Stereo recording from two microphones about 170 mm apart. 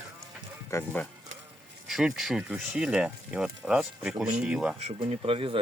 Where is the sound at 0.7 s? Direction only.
10° left (ahead or behind).